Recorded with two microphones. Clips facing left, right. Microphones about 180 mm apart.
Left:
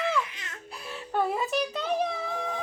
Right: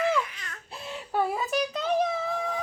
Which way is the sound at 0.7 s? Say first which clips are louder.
Right 2 dB; 20° right (ahead or behind).